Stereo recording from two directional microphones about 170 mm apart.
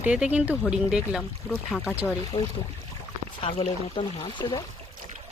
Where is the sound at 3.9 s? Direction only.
30° left (ahead or behind).